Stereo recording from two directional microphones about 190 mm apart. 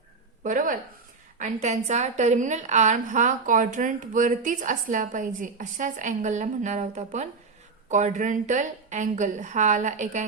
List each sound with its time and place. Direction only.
0.4 s a woman's voice: 45° right (ahead or behind)